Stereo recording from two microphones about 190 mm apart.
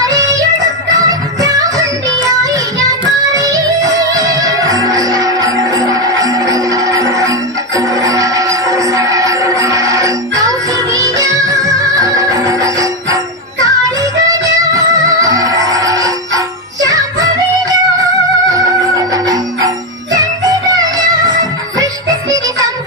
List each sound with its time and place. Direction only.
0.1 s music: 15° right (ahead or behind)